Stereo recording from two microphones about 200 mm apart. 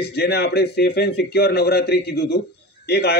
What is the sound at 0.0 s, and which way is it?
Speech, 55° left (ahead or behind).